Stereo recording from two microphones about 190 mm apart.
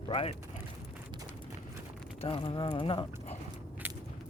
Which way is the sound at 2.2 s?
25° left (ahead or behind).